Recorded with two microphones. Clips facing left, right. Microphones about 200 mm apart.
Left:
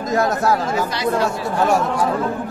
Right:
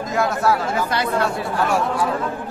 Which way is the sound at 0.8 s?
55° right (ahead or behind).